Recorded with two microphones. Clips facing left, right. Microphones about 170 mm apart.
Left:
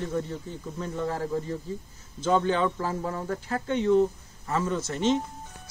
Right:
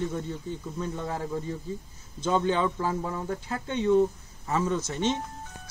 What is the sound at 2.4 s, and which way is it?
Speech, 20° right (ahead or behind).